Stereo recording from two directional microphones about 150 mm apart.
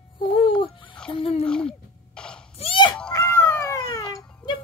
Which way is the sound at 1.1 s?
40° left (ahead or behind).